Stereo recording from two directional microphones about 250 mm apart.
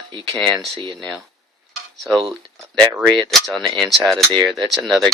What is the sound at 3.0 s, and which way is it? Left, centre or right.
Speech, centre.